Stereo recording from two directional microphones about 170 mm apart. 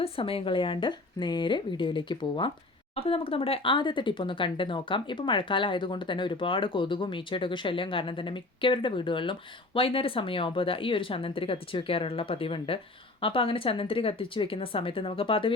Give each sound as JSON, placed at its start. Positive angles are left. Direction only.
{"t": 0.0, "sound": "speech", "side_deg": 35}